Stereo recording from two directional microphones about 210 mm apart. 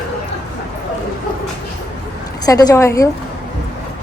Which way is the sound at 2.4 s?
20° left (ahead or behind).